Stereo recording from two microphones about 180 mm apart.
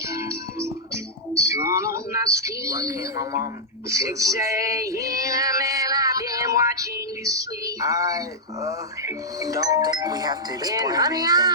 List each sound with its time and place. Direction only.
0.1 s music: 15° right (ahead or behind)
1.3 s a sound: 15° right (ahead or behind)
3.8 s female singing: 15° right (ahead or behind)
7.3 s speech: 20° right (ahead or behind)